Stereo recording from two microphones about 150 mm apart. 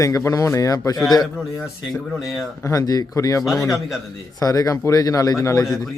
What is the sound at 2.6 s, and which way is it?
Speech, 20° left (ahead or behind).